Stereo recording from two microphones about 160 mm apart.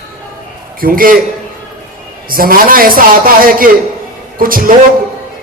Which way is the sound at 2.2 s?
65° right (ahead or behind).